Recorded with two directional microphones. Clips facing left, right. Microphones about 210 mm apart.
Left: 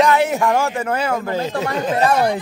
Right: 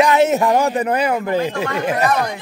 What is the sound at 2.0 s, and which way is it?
Speech, 30° left (ahead or behind).